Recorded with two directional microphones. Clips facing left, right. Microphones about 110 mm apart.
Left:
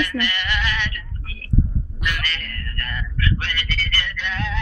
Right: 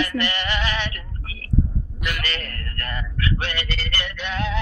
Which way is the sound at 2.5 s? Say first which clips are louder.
Even; 35° right (ahead or behind).